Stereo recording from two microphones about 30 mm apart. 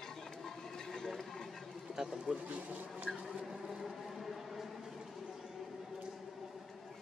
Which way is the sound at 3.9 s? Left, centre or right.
Centre.